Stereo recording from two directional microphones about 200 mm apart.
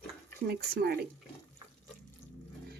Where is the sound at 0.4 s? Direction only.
50° right (ahead or behind).